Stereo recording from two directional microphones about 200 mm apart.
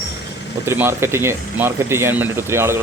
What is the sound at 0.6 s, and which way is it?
Speech, 15° right (ahead or behind).